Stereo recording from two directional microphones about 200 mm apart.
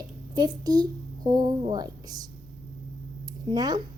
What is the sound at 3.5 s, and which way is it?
Speech, 20° right (ahead or behind).